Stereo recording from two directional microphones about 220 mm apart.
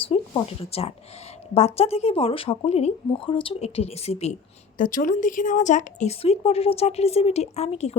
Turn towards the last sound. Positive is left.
turn(degrees=30)  # may be behind; listen again after turning